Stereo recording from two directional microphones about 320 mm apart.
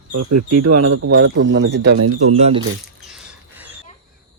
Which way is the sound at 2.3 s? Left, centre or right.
Centre.